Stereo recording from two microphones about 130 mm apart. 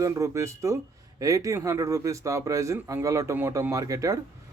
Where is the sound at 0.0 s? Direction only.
25° right (ahead or behind).